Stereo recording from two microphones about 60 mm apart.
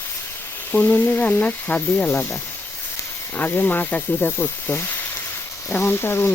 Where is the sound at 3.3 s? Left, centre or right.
Left.